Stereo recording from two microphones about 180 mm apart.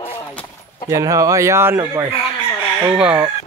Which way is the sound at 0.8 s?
15° right (ahead or behind).